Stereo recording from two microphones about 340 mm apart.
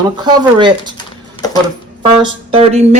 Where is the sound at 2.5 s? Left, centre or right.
Centre.